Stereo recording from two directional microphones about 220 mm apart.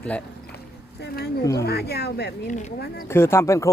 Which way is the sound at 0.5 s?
45° left (ahead or behind).